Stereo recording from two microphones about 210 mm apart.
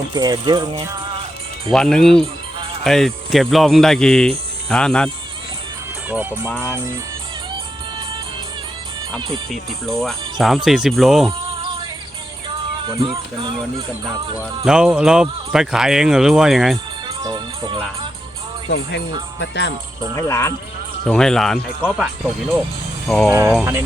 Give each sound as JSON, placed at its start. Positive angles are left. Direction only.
{"t": 0.1, "sound": "speech", "side_deg": -20}
{"t": 1.7, "sound": "speech", "side_deg": 5}
{"t": 6.5, "sound": "speech", "side_deg": 10}
{"t": 9.5, "sound": "speech", "side_deg": 0}
{"t": 13.0, "sound": "speech", "side_deg": -25}
{"t": 14.6, "sound": "speech", "side_deg": -5}
{"t": 17.1, "sound": "music", "side_deg": -20}
{"t": 18.7, "sound": "speech", "side_deg": 55}
{"t": 20.1, "sound": "speech", "side_deg": 15}
{"t": 21.1, "sound": "speech", "side_deg": 5}
{"t": 23.3, "sound": "speech", "side_deg": -15}